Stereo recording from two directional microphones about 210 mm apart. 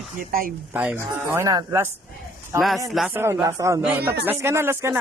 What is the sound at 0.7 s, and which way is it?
Speech, 10° right (ahead or behind).